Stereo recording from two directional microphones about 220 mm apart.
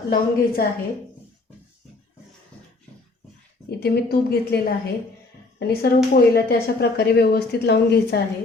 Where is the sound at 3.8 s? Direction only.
45° left (ahead or behind).